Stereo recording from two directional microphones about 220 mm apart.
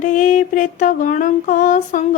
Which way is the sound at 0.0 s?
35° left (ahead or behind).